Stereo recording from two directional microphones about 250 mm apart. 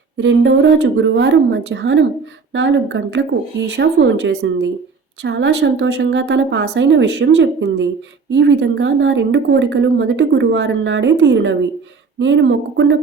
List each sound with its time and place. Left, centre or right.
0.2 s a woman's voice: right